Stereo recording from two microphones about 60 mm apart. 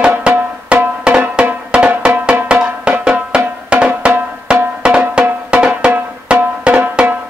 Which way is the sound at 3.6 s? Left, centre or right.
Centre.